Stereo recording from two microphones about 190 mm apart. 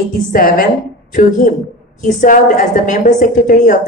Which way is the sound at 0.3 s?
50° left (ahead or behind).